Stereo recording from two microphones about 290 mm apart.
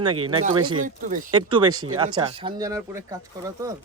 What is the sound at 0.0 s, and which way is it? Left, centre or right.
Speech, right.